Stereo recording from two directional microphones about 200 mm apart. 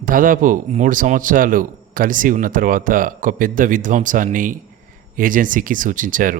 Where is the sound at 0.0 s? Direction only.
45° right (ahead or behind).